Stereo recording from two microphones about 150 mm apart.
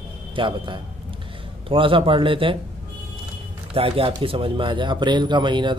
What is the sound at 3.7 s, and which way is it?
Speech, 40° right (ahead or behind).